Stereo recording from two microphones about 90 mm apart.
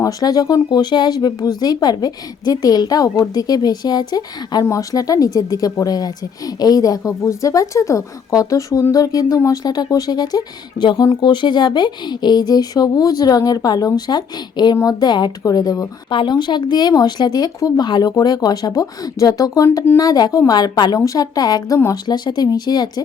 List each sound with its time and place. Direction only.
0.0 s speech: 45° left (ahead or behind)
4.6 s a woman's voice: 40° left (ahead or behind)
16.1 s speech: 55° left (ahead or behind)